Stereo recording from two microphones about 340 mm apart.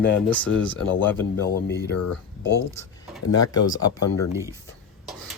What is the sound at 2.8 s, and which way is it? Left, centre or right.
Speech, centre.